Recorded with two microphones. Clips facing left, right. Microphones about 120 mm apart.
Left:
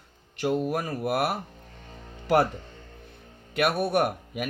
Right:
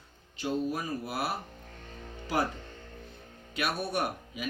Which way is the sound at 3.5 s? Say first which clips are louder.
Left 8 dB; 60° left (ahead or behind).